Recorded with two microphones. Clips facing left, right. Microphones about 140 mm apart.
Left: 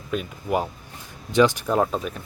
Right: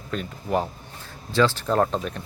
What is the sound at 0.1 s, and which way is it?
Speech, 10° left (ahead or behind).